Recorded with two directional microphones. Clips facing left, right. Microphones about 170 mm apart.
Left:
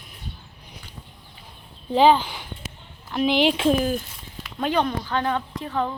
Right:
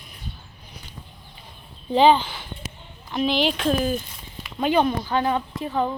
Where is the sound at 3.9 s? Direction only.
5° left (ahead or behind); by 5.9 s 15° right (ahead or behind).